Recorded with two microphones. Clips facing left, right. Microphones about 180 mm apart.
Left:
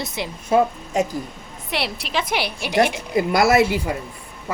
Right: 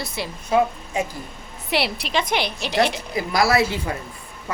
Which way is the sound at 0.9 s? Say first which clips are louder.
Left 4 dB; 40° left (ahead or behind).